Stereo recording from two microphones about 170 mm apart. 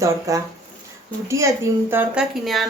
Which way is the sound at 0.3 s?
20° right (ahead or behind).